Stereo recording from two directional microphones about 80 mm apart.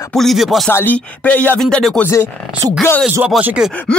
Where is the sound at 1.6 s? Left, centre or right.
Centre.